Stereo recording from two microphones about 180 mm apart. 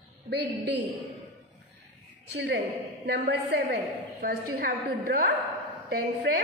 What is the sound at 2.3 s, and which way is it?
A woman's voice, 70° right (ahead or behind).